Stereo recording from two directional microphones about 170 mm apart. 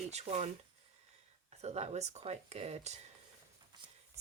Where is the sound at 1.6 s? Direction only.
40° right (ahead or behind).